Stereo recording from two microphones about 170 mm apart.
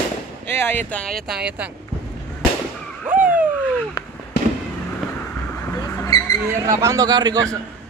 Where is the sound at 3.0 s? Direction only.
10° right (ahead or behind).